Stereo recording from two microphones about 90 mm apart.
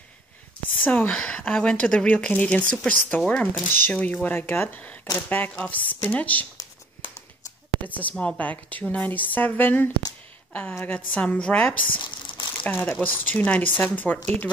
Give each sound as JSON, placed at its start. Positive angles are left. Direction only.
{"t": 0.8, "sound": "speech", "side_deg": 15}
{"t": 7.9, "sound": "speech", "side_deg": 15}
{"t": 12.0, "sound": "crumpling", "side_deg": 65}
{"t": 12.6, "sound": "speech", "side_deg": 20}